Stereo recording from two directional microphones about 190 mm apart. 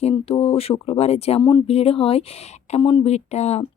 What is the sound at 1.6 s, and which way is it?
A woman's voice, 30° left (ahead or behind).